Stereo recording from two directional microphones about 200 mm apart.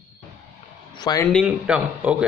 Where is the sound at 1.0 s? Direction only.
20° left (ahead or behind).